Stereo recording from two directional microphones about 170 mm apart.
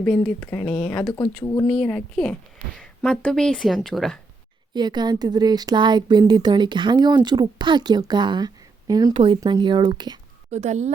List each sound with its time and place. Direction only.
0.3 s speech: 10° left (ahead or behind)
4.7 s speech: 25° right (ahead or behind)
10.5 s speech: 40° right (ahead or behind)